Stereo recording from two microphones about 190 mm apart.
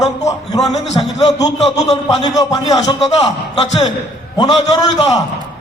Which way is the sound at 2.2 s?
20° left (ahead or behind).